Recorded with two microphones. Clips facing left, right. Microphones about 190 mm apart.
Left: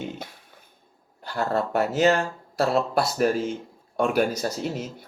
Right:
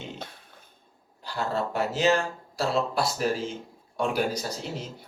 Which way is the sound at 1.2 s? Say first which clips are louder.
Left 4 dB; 55° left (ahead or behind).